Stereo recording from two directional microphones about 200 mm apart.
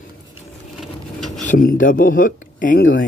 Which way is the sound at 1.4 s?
40° left (ahead or behind).